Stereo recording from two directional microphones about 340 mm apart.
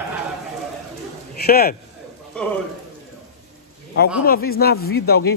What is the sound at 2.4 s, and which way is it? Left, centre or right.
Speech, centre.